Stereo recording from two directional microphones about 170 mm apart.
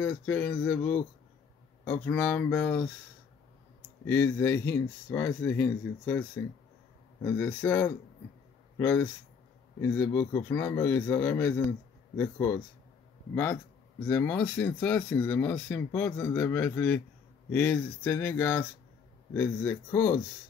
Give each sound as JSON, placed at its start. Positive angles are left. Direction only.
{"t": 0.0, "sound": "speech", "side_deg": 10}
{"t": 4.0, "sound": "speech", "side_deg": 15}
{"t": 13.3, "sound": "speech", "side_deg": 15}